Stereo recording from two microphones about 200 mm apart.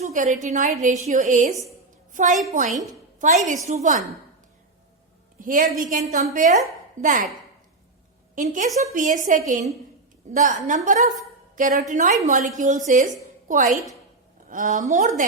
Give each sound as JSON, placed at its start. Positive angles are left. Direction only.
{"t": 0.0, "sound": "a sound", "side_deg": -40}
{"t": 0.4, "sound": "a woman's voice", "side_deg": -40}
{"t": 5.4, "sound": "a woman's voice", "side_deg": -40}
{"t": 8.4, "sound": "a woman's voice", "side_deg": -35}